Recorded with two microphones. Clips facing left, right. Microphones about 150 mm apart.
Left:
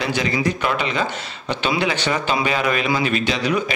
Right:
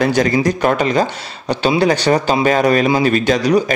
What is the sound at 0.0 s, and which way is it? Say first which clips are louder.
A man's voice: right 7 dB; 45° right (ahead or behind).